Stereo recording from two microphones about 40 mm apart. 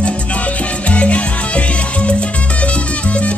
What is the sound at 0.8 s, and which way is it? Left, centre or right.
Music, left.